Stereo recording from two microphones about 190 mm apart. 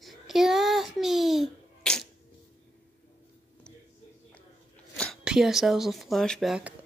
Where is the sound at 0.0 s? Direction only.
Centre (ahead or behind).